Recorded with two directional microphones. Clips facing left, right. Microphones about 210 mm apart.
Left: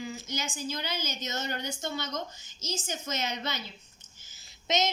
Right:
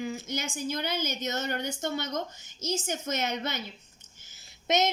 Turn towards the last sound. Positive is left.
turn(degrees=-55)  # may be behind; listen again after turning